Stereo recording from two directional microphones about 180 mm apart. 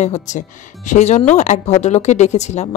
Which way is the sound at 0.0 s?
40° left (ahead or behind).